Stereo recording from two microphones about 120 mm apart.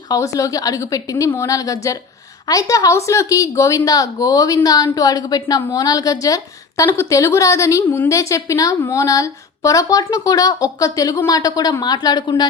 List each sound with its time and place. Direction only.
0.1 s a woman's voice: 30° left (ahead or behind)